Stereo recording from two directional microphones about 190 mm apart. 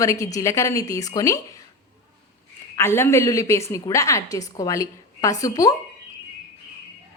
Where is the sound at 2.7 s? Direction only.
15° left (ahead or behind).